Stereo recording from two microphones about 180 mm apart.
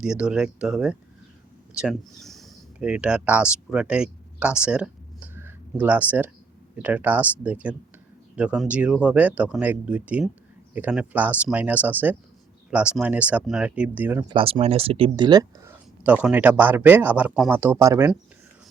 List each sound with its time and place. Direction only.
0.0 s speech: 5° right (ahead or behind)
14.3 s speech: 30° right (ahead or behind)
16.0 s speech: 10° right (ahead or behind)